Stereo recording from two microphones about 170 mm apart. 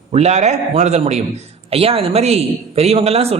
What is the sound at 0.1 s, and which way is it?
Speech, 40° right (ahead or behind).